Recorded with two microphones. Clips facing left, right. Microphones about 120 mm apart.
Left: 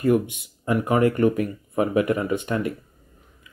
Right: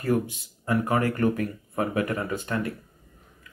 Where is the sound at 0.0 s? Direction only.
20° left (ahead or behind).